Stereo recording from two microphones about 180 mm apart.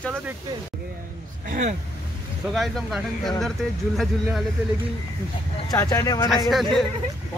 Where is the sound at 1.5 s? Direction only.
40° right (ahead or behind).